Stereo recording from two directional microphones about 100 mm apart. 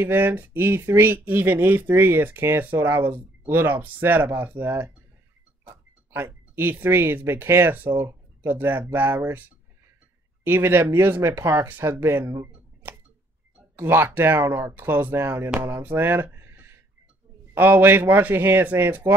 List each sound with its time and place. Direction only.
0.0 s speech: 20° right (ahead or behind)
13.7 s speech: 25° right (ahead or behind)